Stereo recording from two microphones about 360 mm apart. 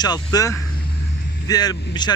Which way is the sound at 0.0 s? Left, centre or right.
Centre.